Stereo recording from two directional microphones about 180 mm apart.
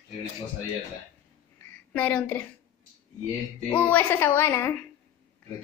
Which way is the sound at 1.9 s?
5° left (ahead or behind).